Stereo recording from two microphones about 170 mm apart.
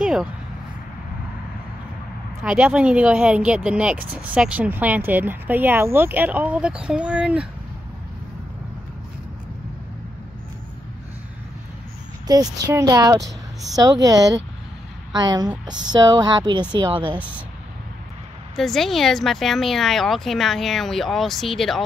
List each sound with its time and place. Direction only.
0.0 s a sound: 5° right (ahead or behind)
2.4 s speech: 5° right (ahead or behind)
12.3 s speech: 25° right (ahead or behind)
18.6 s speech: centre (ahead or behind)